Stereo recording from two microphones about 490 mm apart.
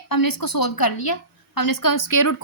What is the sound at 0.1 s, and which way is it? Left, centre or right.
A woman's voice, left.